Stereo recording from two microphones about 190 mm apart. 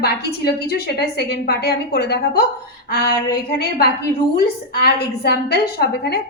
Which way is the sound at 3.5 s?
55° left (ahead or behind).